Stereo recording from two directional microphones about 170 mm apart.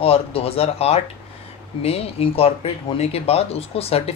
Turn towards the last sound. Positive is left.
turn(degrees=35)  # may be behind; listen again after turning